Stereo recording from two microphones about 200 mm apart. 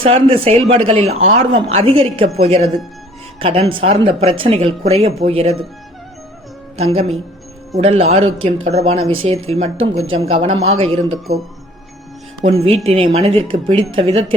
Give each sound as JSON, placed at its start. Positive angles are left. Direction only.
{"t": 0.0, "sound": "a woman's voice", "side_deg": -30}
{"t": 6.7, "sound": "a woman's voice", "side_deg": -30}
{"t": 8.2, "sound": "speech", "side_deg": -85}
{"t": 8.6, "sound": "a woman's voice", "side_deg": -30}
{"t": 12.4, "sound": "speech", "side_deg": -30}